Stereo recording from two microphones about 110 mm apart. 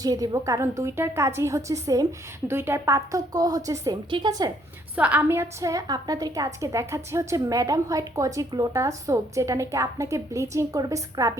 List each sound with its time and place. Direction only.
0.0 s a woman's voice: 35° right (ahead or behind)
4.9 s a woman's voice: 15° right (ahead or behind); by 11.3 s 30° right (ahead or behind)